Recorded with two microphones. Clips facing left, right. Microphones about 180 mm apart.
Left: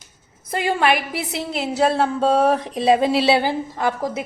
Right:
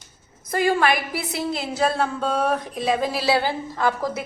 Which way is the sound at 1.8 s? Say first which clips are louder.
Left 5 dB; 35° left (ahead or behind).